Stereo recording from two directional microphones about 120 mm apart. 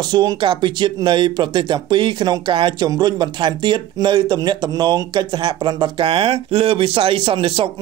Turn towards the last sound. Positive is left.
turn(degrees=-50)  # may be behind; listen again after turning